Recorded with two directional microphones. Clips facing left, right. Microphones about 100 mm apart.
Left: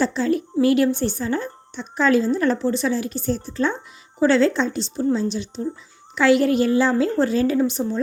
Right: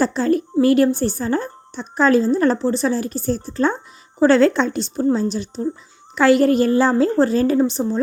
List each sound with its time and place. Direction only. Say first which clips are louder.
0.0 s a woman's voice: right 3 dB; 45° right (ahead or behind)
4.2 s a woman's voice: right 3 dB; 50° right (ahead or behind)
5.0 s a woman's voice: right 2 dB; 40° right (ahead or behind)